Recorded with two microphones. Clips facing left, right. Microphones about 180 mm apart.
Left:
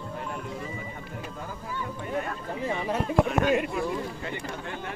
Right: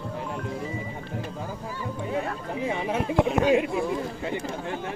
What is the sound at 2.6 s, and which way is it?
Speech, 10° right (ahead or behind).